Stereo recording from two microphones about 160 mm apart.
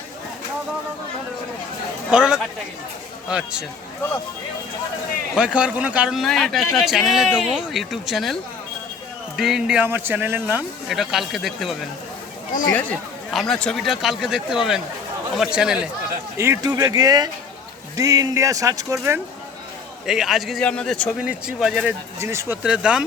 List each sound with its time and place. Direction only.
2.0 s a man's voice: 5° right (ahead or behind)
5.3 s a man's voice: 5° right (ahead or behind)
16.4 s speech: 20° right (ahead or behind)
20.1 s a man's voice: centre (ahead or behind)
21.2 s a man's voice: 5° right (ahead or behind)
22.2 s speech: 15° right (ahead or behind)
22.6 s a man's voice: 5° right (ahead or behind)